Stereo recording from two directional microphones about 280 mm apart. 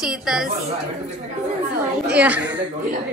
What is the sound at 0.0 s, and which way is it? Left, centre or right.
Speech, centre.